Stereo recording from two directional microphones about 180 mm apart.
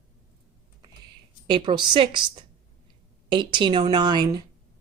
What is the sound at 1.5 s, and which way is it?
A woman's voice, 25° right (ahead or behind).